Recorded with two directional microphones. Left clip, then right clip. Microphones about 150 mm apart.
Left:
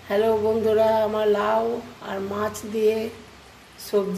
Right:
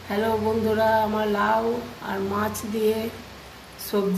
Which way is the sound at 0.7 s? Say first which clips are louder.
Left 1 dB; 45° left (ahead or behind).